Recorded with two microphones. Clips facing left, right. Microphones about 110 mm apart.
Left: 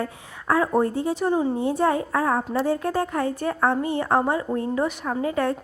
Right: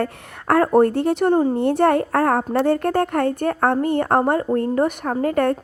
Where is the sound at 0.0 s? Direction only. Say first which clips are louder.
Right 5 dB; 65° right (ahead or behind).